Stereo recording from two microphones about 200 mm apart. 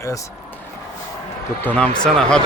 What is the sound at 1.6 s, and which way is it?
Speech, 5° left (ahead or behind).